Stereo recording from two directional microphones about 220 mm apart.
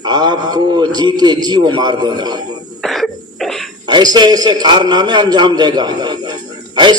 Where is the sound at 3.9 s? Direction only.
20° right (ahead or behind).